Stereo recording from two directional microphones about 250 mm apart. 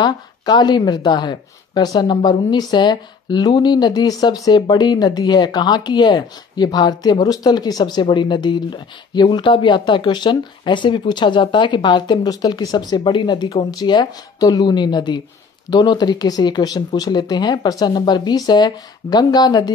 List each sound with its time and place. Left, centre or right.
0.0 s speech: centre